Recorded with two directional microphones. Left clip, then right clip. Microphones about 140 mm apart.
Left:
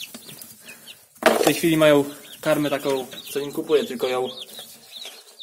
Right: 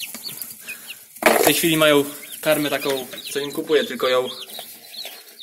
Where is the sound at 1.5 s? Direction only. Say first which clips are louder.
Right 1 dB; 15° left (ahead or behind).